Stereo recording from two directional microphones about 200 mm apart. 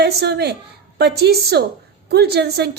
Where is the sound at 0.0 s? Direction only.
55° right (ahead or behind).